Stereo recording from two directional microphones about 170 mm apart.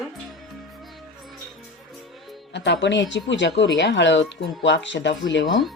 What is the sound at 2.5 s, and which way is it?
Speech, 90° left.